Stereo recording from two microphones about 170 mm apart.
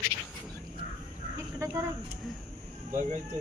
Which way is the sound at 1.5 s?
15° right (ahead or behind).